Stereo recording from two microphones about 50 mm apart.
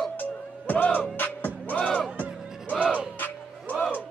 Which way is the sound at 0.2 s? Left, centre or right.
Left.